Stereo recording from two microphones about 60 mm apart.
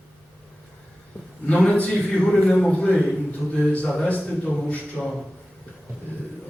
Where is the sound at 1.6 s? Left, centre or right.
Left.